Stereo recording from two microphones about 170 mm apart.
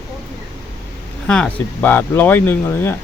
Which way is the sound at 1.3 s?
10° left (ahead or behind).